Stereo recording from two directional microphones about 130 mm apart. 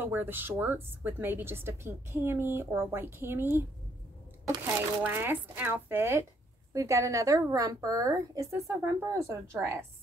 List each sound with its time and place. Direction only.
0.0 s a woman's voice: 15° right (ahead or behind)
5.0 s a woman's voice: 15° right (ahead or behind)